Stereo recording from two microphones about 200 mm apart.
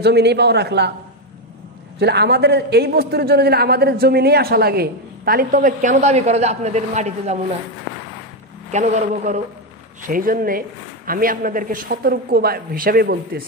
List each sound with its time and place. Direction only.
0.0 s a man's voice: 55° right (ahead or behind)
2.0 s a man's voice: 55° right (ahead or behind); by 7.3 s 35° right (ahead or behind)
8.7 s a man's voice: 35° right (ahead or behind)